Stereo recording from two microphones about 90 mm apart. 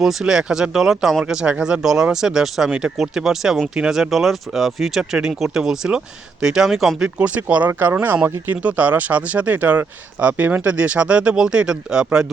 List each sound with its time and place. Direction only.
0.0 s speech: 5° right (ahead or behind)
7.2 s speech: 15° right (ahead or behind)